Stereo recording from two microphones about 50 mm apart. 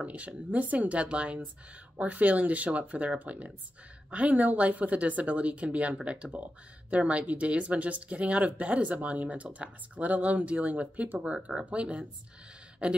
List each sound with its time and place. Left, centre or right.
0.0 s speech: right